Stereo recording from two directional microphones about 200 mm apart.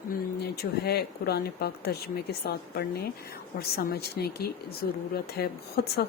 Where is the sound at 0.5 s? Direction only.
50° left (ahead or behind).